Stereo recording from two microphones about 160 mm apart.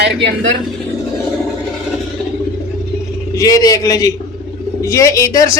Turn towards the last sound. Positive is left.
turn(degrees=20)  # may be behind; listen again after turning